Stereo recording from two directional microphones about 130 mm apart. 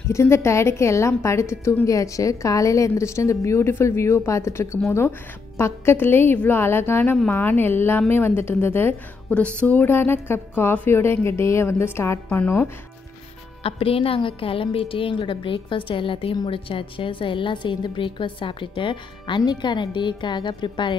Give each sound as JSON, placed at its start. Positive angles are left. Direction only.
{"t": 0.1, "sound": "a woman's voice", "side_deg": 20}
{"t": 13.6, "sound": "a woman's voice", "side_deg": 45}